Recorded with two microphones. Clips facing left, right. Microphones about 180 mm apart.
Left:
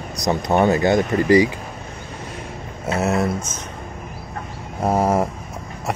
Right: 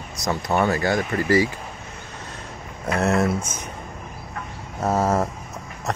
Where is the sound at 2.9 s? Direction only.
Centre (ahead or behind).